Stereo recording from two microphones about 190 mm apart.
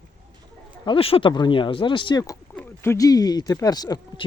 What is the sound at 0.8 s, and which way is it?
Speech, 30° left (ahead or behind).